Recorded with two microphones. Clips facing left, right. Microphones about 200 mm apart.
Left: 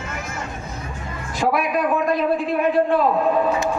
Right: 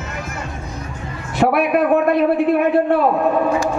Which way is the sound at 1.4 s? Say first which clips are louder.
Right 5 dB; 60° right (ahead or behind).